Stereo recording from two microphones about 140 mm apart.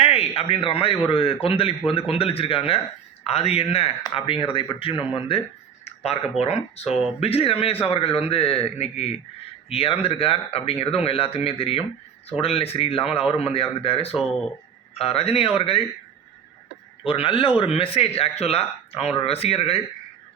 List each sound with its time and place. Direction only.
0.0 s a man's voice: 45° left (ahead or behind)
5.8 s a sound: 45° left (ahead or behind)
6.4 s speech: 50° left (ahead or behind)
17.1 s a man's voice: 40° left (ahead or behind)